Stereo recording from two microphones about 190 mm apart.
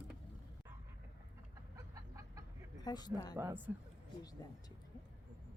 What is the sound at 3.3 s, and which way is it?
Speech, 10° right (ahead or behind).